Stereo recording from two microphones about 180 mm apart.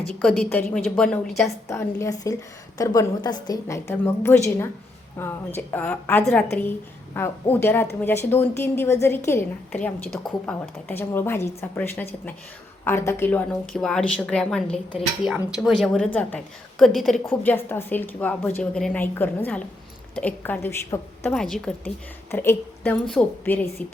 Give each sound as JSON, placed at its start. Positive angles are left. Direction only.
{"t": 0.1, "sound": "a woman's voice", "side_deg": 5}
{"t": 1.6, "sound": "a woman's voice", "side_deg": 15}
{"t": 17.2, "sound": "a woman's voice", "side_deg": 10}
{"t": 21.3, "sound": "a woman's voice", "side_deg": 5}